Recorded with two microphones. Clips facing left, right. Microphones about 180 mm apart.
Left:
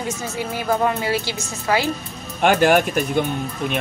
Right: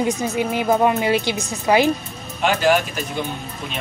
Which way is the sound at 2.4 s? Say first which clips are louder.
Left 2 dB; 55° left (ahead or behind).